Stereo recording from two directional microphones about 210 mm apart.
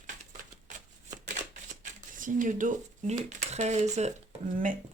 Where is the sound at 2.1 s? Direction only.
40° right (ahead or behind).